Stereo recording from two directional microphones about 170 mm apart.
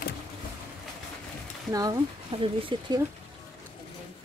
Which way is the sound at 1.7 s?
20° right (ahead or behind).